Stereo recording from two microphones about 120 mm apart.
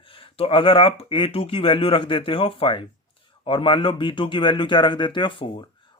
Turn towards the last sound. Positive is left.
turn(degrees=40)  # may be behind; listen again after turning